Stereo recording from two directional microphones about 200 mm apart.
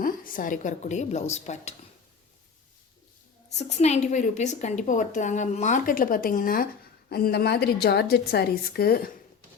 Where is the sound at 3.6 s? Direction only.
35° left (ahead or behind).